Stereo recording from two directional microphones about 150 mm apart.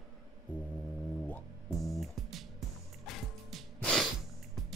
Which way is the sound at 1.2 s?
5° left (ahead or behind).